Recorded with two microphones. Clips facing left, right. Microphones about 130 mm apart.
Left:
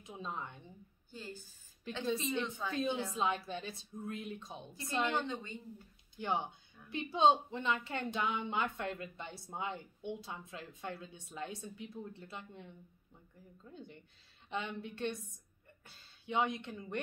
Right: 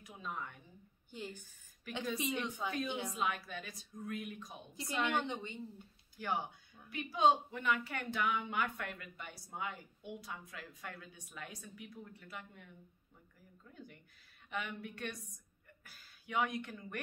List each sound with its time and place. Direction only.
0.0 s a woman's voice: 25° left (ahead or behind)
1.1 s a woman's voice: 20° right (ahead or behind)
2.0 s a woman's voice: 25° left (ahead or behind)
2.9 s speech: 20° right (ahead or behind)
3.2 s a woman's voice: 25° left (ahead or behind)
5.2 s speech: 20° right (ahead or behind)
6.1 s a woman's voice: 20° left (ahead or behind)